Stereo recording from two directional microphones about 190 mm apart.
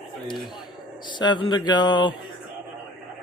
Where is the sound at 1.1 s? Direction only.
25° left (ahead or behind).